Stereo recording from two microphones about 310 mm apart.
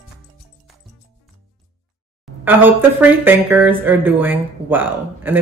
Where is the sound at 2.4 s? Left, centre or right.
Centre.